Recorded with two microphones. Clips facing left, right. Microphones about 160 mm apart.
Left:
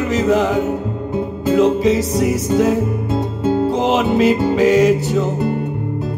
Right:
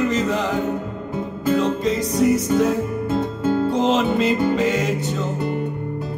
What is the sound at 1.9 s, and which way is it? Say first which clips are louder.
Music: left 2 dB; centre (ahead or behind).